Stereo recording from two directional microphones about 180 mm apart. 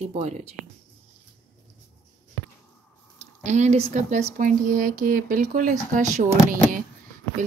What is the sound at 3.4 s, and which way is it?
A woman's voice, 40° right (ahead or behind).